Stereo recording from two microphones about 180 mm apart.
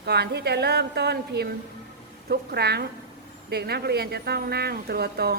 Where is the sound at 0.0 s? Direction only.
65° right (ahead or behind).